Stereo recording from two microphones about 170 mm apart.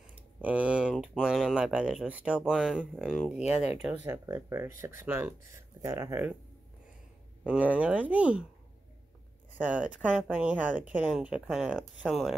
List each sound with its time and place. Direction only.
0.4 s speech: 10° right (ahead or behind)
7.4 s speech: 10° right (ahead or behind)
9.6 s speech: 10° right (ahead or behind)